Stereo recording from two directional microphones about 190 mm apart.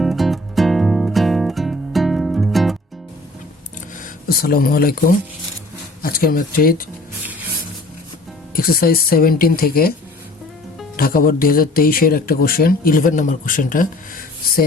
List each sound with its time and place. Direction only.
0.0 s music: centre (ahead or behind)
4.0 s speech: 50° left (ahead or behind)
8.5 s speech: 50° left (ahead or behind)
10.9 s speech: 50° left (ahead or behind)